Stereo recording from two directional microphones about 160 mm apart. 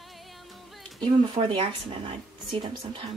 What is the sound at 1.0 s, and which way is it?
Speech, 30° right (ahead or behind).